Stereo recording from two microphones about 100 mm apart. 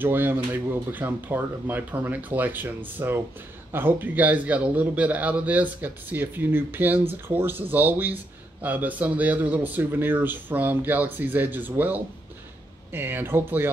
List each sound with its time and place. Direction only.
0.0 s a man's voice: 20° right (ahead or behind)